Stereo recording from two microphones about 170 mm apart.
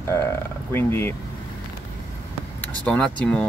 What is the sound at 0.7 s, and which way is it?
Speech, 15° left (ahead or behind).